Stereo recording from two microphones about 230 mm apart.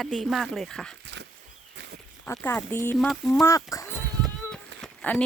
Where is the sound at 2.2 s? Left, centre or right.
Centre.